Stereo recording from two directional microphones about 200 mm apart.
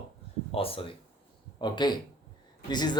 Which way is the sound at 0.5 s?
30° left (ahead or behind).